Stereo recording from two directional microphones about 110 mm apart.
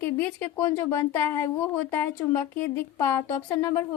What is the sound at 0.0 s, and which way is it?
A woman's voice, 20° left (ahead or behind).